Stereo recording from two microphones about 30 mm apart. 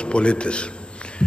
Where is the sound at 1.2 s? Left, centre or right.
Left.